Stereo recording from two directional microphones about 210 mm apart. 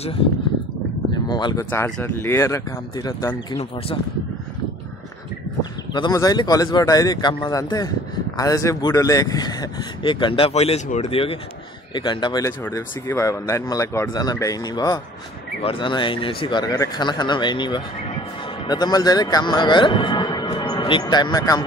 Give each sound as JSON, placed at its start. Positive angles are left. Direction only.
{"t": 1.3, "sound": "speech", "side_deg": 20}
{"t": 5.6, "sound": "speech", "side_deg": 20}